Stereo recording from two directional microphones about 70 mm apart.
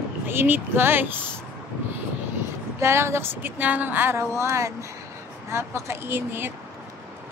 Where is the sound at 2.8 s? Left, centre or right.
Right.